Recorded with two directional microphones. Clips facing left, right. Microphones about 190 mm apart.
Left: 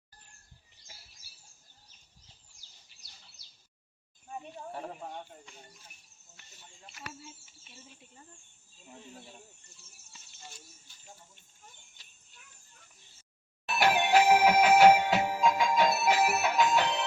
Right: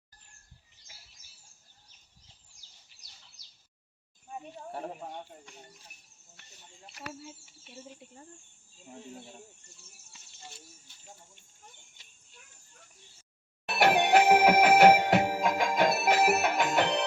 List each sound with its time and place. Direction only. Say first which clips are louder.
13.7 s music: right 2 dB; 65° right (ahead or behind)